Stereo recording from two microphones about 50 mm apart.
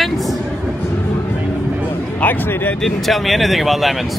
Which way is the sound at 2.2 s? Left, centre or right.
Left.